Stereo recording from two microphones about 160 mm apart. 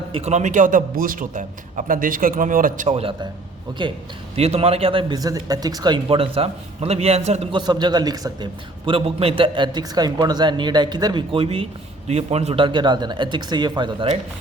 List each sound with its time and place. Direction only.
0.1 s a man's voice: 45° right (ahead or behind)
4.4 s a man's voice: 40° right (ahead or behind)
7.5 s a man's voice: 25° right (ahead or behind)
8.9 s a man's voice: 35° right (ahead or behind)